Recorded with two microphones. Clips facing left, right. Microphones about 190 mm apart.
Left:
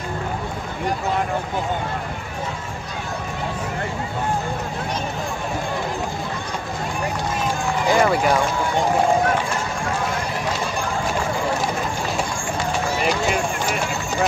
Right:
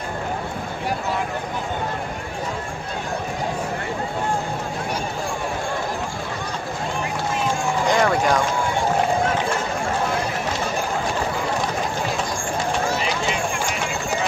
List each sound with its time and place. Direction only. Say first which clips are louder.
7.9 s speech: left 2 dB; 5° left (ahead or behind)